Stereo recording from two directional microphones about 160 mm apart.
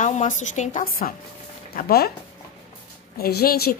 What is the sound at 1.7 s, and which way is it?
Speech, 70° left (ahead or behind).